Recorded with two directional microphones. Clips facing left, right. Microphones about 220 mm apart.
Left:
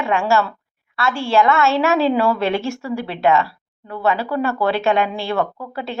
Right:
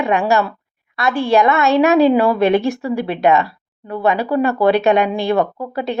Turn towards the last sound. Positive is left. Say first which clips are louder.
# right 6 dB
turn(degrees=-20)  # may be behind; listen again after turning